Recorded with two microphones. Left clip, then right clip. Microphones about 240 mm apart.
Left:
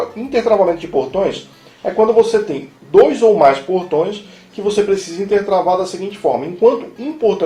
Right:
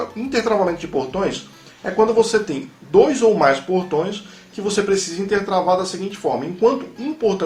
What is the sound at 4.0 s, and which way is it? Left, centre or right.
Speech, right.